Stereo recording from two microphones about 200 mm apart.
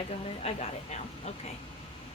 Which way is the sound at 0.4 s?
35° left (ahead or behind).